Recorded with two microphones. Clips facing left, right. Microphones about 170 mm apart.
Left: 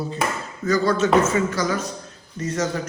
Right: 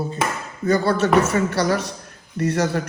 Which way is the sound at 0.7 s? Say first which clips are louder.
Right 1 dB; 60° right (ahead or behind).